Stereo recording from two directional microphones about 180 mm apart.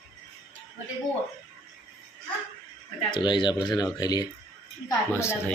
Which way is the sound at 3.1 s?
25° left (ahead or behind).